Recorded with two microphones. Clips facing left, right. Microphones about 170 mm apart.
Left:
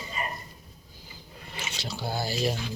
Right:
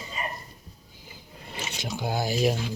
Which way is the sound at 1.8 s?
15° right (ahead or behind).